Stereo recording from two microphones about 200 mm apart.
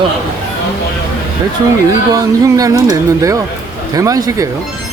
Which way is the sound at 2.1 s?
15° right (ahead or behind).